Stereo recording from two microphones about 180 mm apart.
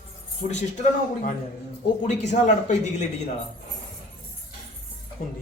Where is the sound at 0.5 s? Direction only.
45° left (ahead or behind).